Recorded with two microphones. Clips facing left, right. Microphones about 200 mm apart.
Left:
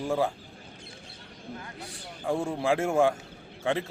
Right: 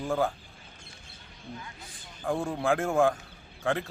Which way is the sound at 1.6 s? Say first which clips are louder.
Left 5 dB; 70° left (ahead or behind).